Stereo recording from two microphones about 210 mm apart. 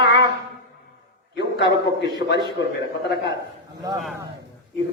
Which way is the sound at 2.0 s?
55° left (ahead or behind).